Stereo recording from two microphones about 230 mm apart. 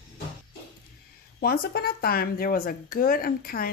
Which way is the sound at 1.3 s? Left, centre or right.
Left.